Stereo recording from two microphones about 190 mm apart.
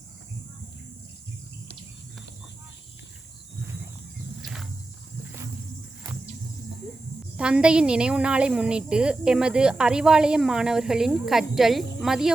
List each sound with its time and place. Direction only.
4.4 s wild animals: centre (ahead or behind)
7.3 s a woman's voice: 5° right (ahead or behind)